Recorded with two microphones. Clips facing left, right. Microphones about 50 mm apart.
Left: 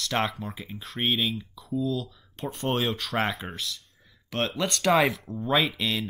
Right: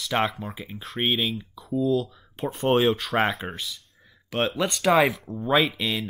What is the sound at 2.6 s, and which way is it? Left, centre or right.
Speech, centre.